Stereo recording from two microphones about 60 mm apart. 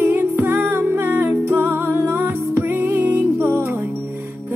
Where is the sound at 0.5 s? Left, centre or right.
Right.